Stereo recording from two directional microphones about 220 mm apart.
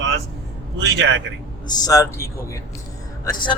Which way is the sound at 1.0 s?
55° right (ahead or behind).